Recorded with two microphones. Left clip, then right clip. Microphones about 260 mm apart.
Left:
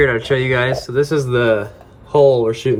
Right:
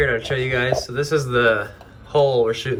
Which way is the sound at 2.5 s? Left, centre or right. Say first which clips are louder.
Left 6 dB; centre.